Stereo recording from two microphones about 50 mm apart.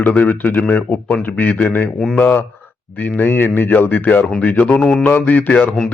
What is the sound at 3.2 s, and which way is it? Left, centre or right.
Speech, left.